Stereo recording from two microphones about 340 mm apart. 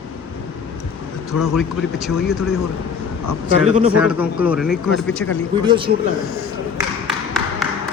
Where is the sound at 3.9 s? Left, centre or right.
Centre.